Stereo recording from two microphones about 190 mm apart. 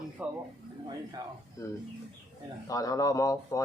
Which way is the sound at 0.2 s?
5° right (ahead or behind).